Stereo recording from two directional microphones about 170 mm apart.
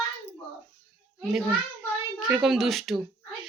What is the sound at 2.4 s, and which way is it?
Speech, centre (ahead or behind).